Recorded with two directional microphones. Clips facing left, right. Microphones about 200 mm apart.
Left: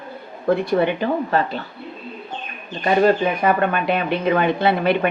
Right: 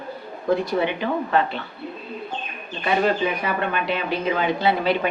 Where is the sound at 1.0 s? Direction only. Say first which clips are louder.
Left 2 dB; 40° left (ahead or behind).